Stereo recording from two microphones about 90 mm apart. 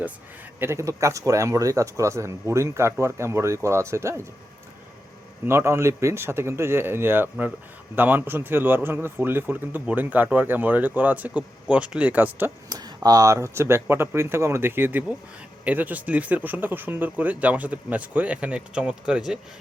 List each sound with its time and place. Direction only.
0.6 s speech: 30° right (ahead or behind)
5.5 s speech: 30° right (ahead or behind)
12.6 s speech: 45° right (ahead or behind); by 19.4 s 10° right (ahead or behind)